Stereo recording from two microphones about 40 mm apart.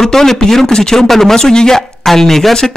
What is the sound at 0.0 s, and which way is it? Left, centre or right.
Speech, centre.